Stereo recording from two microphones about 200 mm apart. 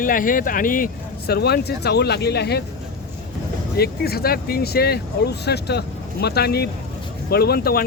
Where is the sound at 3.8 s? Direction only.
50° left (ahead or behind).